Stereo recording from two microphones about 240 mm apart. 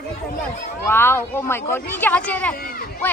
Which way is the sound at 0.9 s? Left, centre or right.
Centre.